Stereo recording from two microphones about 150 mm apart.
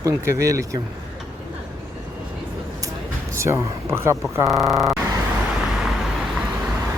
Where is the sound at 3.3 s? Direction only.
15° right (ahead or behind).